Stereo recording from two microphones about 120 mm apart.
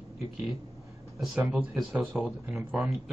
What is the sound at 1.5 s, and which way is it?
Speech, 5° right (ahead or behind).